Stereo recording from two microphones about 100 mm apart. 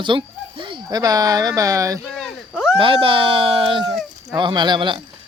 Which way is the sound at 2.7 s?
60° right (ahead or behind).